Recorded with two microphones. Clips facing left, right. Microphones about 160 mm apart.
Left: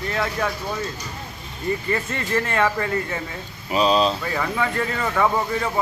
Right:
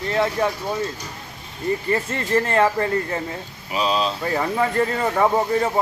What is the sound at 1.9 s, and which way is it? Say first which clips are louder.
Speech: right 5 dB; 30° right (ahead or behind).